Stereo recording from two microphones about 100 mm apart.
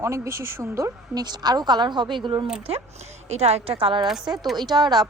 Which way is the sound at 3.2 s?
90° right.